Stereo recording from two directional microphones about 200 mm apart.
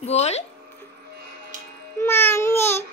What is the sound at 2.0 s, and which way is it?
Babbling, 10° left (ahead or behind).